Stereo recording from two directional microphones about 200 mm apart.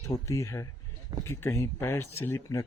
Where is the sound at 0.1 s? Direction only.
15° left (ahead or behind).